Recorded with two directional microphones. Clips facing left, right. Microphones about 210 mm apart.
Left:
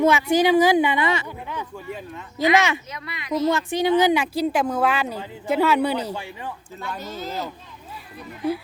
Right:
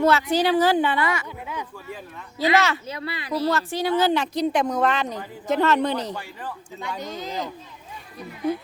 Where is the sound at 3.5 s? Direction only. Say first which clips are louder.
Left 4 dB; 15° left (ahead or behind).